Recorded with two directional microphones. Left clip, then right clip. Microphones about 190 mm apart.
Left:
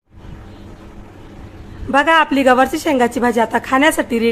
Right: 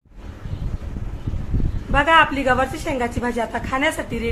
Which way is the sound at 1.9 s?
60° left (ahead or behind).